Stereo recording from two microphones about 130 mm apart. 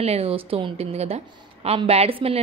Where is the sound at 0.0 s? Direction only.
50° right (ahead or behind).